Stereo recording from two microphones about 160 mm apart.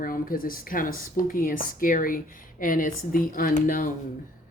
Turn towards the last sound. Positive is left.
turn(degrees=55)  # may be behind; listen again after turning